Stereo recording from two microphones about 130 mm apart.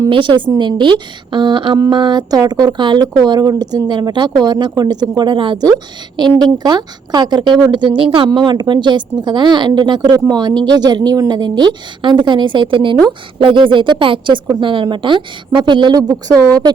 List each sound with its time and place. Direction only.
0.1 s a woman's voice: 40° right (ahead or behind)